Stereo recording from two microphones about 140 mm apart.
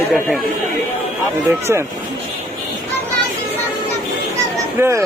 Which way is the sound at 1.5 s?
20° right (ahead or behind).